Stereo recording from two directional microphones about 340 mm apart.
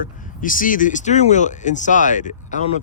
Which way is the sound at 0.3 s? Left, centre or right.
Left.